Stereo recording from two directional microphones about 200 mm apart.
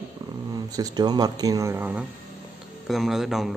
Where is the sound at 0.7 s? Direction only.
20° right (ahead or behind).